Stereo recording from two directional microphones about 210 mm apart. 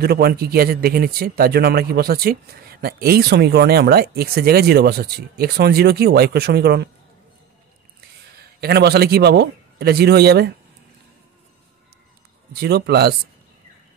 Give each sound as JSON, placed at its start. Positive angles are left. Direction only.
{"t": 0.0, "sound": "speech", "side_deg": -45}
{"t": 8.4, "sound": "a man's voice", "side_deg": -50}
{"t": 12.5, "sound": "speech", "side_deg": -50}